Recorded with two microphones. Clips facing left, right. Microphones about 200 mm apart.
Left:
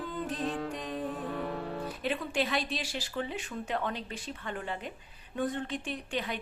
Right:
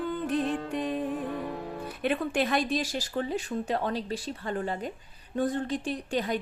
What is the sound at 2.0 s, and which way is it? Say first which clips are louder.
A woman's voice: right 5 dB; 50° right (ahead or behind).